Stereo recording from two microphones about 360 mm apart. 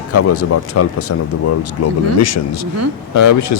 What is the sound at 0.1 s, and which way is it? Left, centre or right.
A man's voice, left.